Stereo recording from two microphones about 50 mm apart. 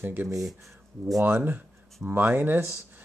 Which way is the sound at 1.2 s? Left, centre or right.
Right.